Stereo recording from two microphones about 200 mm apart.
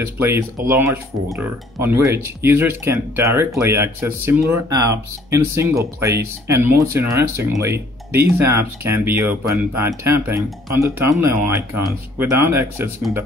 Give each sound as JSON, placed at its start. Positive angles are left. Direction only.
{"t": 0.0, "sound": "speech", "side_deg": -10}